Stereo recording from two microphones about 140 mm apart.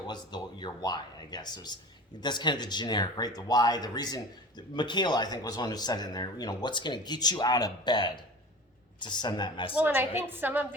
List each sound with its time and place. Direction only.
0.1 s speech: 30° left (ahead or behind)
9.7 s a woman's voice: 15° right (ahead or behind)